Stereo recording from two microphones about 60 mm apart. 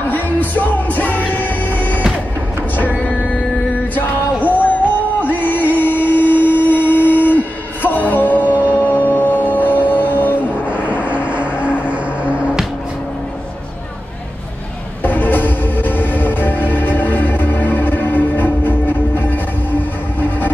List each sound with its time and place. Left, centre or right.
0.1 s music: left
4.6 s a sound: left
5.3 s music: left
6.0 s a sound: left
8.5 s music: right
8.8 s music: left
10.7 s vehicle: right
15.0 s music: left